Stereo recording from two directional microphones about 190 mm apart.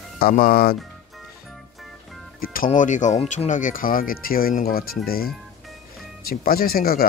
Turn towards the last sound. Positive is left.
turn(degrees=50)  # may be behind; listen again after turning